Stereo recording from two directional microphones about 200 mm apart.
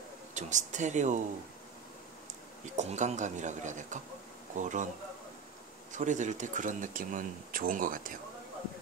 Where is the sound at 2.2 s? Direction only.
35° right (ahead or behind).